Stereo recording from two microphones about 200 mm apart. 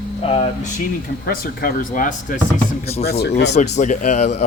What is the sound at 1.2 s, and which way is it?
Speech, 45° left (ahead or behind).